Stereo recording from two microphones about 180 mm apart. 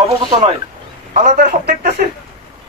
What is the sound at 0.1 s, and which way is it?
Speech, 35° right (ahead or behind).